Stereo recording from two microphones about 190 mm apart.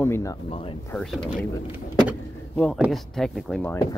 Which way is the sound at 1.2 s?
5° right (ahead or behind).